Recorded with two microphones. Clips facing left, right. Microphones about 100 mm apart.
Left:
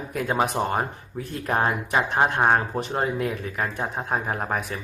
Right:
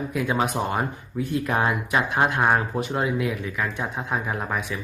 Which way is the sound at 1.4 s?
35° left (ahead or behind).